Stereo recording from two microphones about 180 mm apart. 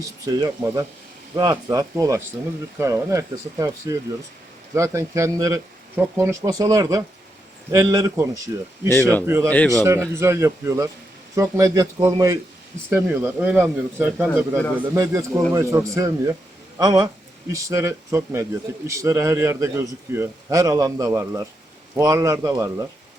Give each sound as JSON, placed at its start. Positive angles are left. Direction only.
{"t": 0.3, "sound": "a man's voice", "side_deg": -20}
{"t": 9.5, "sound": "a man's voice", "side_deg": 5}
{"t": 10.2, "sound": "a man's voice", "side_deg": -15}